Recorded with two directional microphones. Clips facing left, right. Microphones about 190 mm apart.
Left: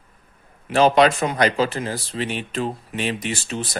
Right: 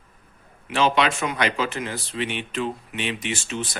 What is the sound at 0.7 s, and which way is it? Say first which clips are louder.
Speech: left 6 dB; 40° left (ahead or behind).